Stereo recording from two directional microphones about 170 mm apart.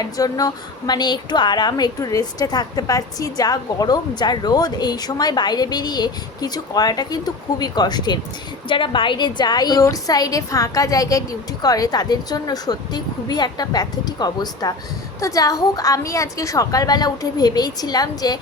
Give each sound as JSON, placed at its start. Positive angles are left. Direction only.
{"t": 0.0, "sound": "a woman's voice", "side_deg": 20}